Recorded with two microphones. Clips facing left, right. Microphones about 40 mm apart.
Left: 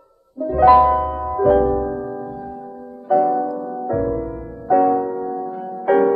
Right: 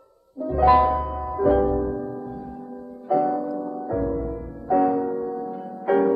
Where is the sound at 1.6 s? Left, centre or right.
Centre.